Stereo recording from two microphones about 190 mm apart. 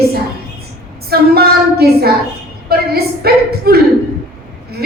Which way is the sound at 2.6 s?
55° right (ahead or behind).